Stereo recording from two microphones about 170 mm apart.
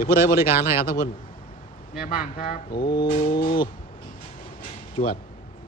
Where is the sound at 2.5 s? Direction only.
60° left (ahead or behind).